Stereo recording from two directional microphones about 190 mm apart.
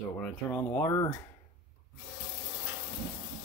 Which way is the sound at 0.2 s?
5° left (ahead or behind).